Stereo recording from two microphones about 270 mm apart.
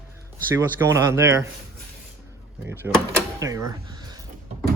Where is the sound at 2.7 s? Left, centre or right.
Centre.